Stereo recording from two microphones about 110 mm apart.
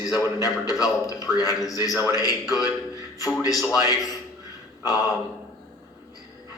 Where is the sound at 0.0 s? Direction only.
35° left (ahead or behind).